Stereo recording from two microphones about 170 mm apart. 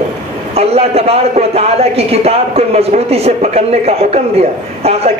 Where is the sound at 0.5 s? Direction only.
35° right (ahead or behind).